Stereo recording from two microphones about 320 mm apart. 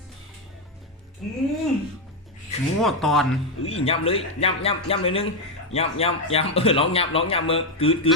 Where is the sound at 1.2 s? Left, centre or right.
Centre.